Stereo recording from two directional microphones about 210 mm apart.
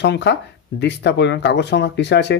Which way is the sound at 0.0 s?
55° left (ahead or behind).